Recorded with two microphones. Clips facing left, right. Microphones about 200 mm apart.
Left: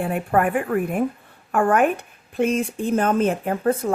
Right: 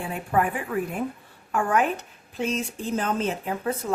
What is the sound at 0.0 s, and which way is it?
Speech, 55° left (ahead or behind).